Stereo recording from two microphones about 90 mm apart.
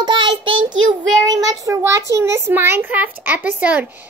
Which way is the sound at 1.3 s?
45° right (ahead or behind).